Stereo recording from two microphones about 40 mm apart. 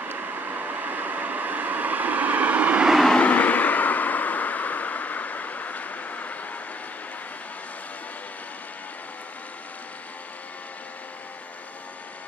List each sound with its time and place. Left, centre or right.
0.0 s vehicle: right
3.2 s vehicle: left